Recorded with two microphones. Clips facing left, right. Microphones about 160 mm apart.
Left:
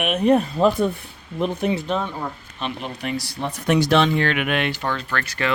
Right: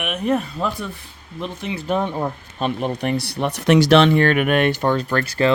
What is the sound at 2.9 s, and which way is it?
Speech, 60° right (ahead or behind).